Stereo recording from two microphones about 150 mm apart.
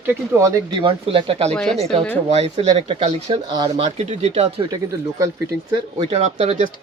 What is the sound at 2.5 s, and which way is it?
Speech, 40° right (ahead or behind).